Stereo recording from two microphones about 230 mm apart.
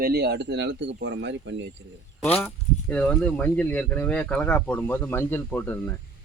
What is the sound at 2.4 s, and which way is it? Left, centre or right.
Speech, centre.